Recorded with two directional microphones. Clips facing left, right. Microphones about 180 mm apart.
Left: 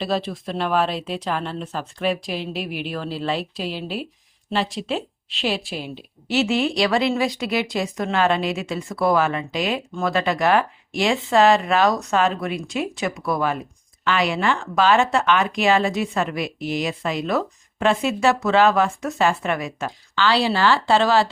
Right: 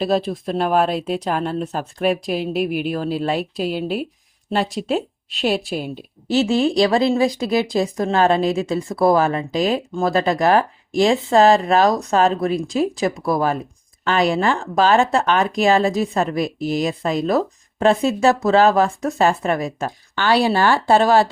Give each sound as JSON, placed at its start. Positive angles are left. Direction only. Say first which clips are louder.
{"t": 0.0, "sound": "speech", "louder": "right 5 dB", "side_deg": -45}
{"t": 6.3, "sound": "speech", "louder": "right 4 dB", "side_deg": -35}
{"t": 20.1, "sound": "speech", "louder": "right 3 dB", "side_deg": -50}